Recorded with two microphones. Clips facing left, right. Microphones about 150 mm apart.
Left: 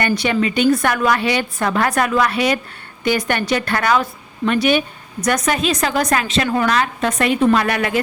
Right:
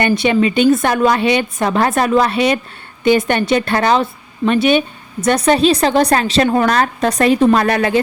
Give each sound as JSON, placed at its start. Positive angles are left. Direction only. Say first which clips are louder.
{"t": 0.0, "sound": "a woman's voice", "louder": "right 4 dB", "side_deg": -20}